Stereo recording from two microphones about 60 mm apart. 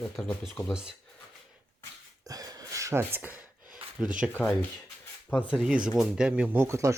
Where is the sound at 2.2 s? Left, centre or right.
Right.